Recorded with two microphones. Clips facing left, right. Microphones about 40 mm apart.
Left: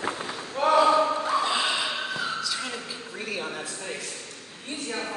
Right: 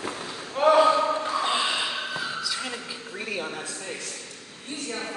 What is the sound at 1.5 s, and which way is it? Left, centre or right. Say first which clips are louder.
Snort: even; centre.